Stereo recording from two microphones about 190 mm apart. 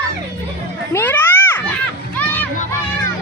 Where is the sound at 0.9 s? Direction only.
10° left (ahead or behind).